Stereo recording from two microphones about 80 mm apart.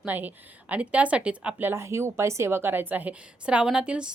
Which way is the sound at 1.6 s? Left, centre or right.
Right.